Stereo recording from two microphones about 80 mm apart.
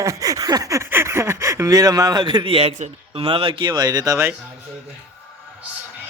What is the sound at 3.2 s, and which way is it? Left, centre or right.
Speech, right.